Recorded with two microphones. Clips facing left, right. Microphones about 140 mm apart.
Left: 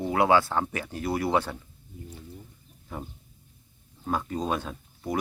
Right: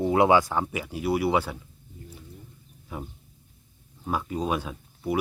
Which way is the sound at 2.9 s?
10° right (ahead or behind).